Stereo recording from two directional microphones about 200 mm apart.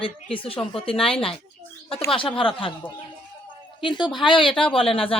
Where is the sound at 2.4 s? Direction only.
25° left (ahead or behind).